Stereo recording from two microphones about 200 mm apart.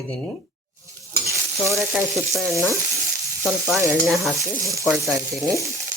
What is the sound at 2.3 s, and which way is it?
Speech, centre (ahead or behind).